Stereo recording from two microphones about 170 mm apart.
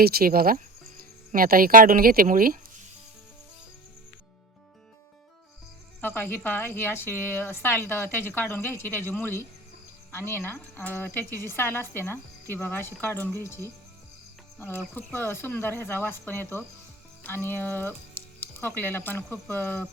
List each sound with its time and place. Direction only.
0.0 s speech: 65° right (ahead or behind)
6.0 s a woman's voice: 10° left (ahead or behind)